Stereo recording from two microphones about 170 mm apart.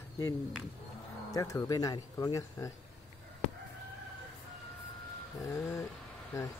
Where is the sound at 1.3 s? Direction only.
20° left (ahead or behind).